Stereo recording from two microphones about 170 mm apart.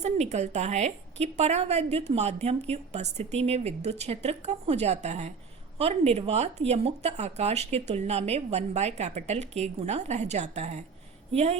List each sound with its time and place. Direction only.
0.0 s a woman's voice: 40° right (ahead or behind)